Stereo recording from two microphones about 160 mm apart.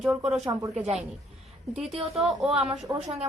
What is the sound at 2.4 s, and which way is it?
Speech, 35° right (ahead or behind).